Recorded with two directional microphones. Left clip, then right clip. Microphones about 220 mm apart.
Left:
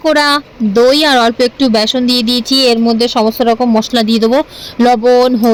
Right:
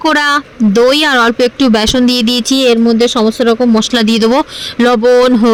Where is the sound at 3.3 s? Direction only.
35° right (ahead or behind).